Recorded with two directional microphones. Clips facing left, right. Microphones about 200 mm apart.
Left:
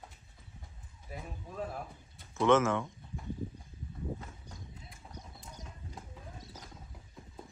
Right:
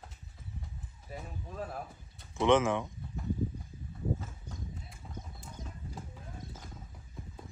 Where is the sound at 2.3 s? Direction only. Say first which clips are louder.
Even; 15° right (ahead or behind).